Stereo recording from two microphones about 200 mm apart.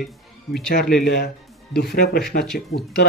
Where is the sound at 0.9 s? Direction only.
55° left (ahead or behind).